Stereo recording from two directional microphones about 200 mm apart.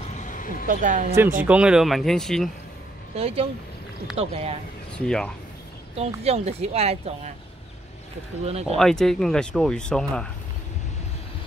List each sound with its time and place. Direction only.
0.1 s a sound: 40° left (ahead or behind)
0.7 s speech: 40° right (ahead or behind)
1.4 s speech: 5° right (ahead or behind)
3.2 s speech: 30° right (ahead or behind)
4.9 s speech: 5° left (ahead or behind)
5.9 s speech: 30° right (ahead or behind)
8.5 s speech: 30° right (ahead or behind)
8.7 s speech: centre (ahead or behind)